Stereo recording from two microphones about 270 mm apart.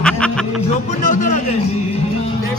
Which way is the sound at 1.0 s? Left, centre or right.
Left.